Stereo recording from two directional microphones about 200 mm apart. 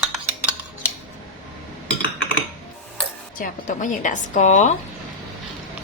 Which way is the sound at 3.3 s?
40° left (ahead or behind).